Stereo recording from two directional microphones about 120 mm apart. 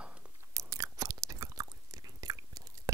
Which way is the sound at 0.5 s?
25° right (ahead or behind).